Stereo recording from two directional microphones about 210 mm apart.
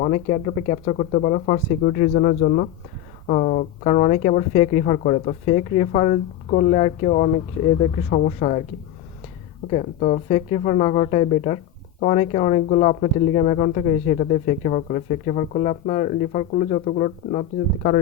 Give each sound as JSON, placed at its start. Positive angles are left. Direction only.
{"t": 0.0, "sound": "speech", "side_deg": 35}
{"t": 9.6, "sound": "speech", "side_deg": 30}